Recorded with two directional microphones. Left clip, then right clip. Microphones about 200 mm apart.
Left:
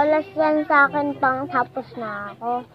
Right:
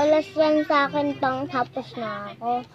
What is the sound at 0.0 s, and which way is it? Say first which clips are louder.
Child singing: left 1 dB; 15° right (ahead or behind).